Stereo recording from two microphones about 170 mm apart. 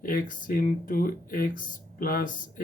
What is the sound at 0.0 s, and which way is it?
Speech, 55° left (ahead or behind).